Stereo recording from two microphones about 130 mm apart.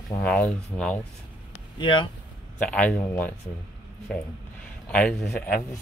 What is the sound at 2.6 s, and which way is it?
Speech, 10° left (ahead or behind).